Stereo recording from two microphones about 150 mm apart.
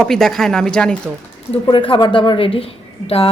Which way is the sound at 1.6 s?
35° left (ahead or behind).